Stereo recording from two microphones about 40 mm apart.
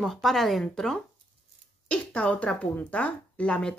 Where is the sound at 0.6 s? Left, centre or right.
Centre.